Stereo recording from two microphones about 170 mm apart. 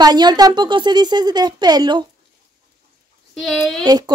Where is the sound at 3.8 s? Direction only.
25° right (ahead or behind).